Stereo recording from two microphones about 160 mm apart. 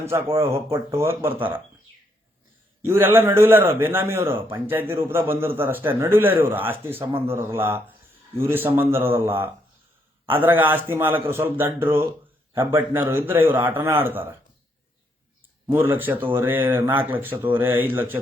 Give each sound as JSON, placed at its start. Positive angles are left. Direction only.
{"t": 0.3, "sound": "a man's voice", "side_deg": -20}
{"t": 2.8, "sound": "a man's voice", "side_deg": -15}
{"t": 15.6, "sound": "a man's voice", "side_deg": -15}